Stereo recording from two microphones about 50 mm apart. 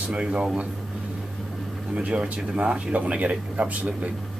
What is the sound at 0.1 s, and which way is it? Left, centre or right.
Speech, right.